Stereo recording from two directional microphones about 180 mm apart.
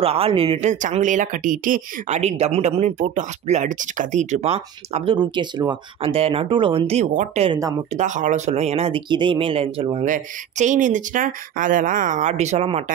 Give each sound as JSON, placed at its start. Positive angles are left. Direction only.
{"t": 0.0, "sound": "speech", "side_deg": -30}
{"t": 10.0, "sound": "speech", "side_deg": -45}